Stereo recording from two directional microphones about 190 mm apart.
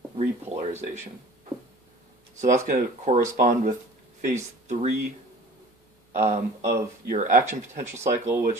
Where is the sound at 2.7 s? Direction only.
45° right (ahead or behind).